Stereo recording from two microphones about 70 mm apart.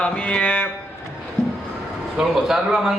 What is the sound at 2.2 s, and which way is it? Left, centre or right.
Speech, centre.